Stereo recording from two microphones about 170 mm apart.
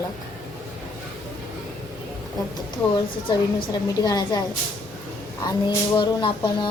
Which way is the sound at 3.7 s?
20° left (ahead or behind).